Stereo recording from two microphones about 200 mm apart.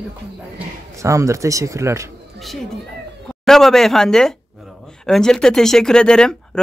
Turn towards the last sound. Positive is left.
turn(degrees=5)  # may be behind; listen again after turning